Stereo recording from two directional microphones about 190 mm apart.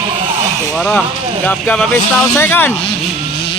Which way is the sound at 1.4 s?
10° left (ahead or behind).